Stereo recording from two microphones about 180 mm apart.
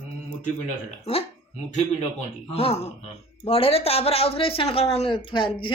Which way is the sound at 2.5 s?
35° left (ahead or behind).